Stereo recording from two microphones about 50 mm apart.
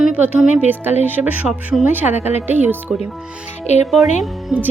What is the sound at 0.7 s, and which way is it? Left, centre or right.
Speech, right.